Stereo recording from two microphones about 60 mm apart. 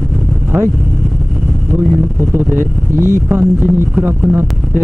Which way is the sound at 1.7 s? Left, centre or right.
Right.